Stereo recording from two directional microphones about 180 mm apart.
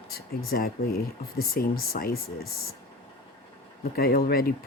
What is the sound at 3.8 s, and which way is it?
Speech, 55° left (ahead or behind).